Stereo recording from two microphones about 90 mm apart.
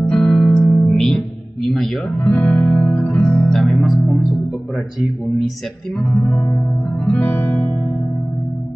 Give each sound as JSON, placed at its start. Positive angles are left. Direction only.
{"t": 0.0, "sound": "music", "side_deg": 10}
{"t": 2.6, "sound": "music", "side_deg": 20}
{"t": 3.4, "sound": "music", "side_deg": 0}
{"t": 6.0, "sound": "music", "side_deg": 15}